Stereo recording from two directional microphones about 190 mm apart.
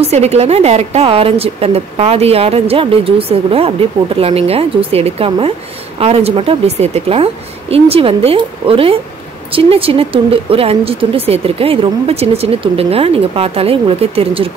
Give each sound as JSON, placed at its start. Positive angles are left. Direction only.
{"t": 0.0, "sound": "a woman's voice", "side_deg": -35}